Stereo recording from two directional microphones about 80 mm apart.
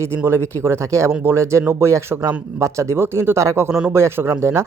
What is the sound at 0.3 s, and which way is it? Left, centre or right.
Speech, right.